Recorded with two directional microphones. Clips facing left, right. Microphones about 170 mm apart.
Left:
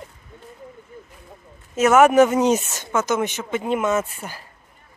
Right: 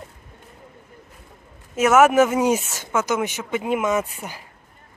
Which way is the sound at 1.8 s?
5° right (ahead or behind).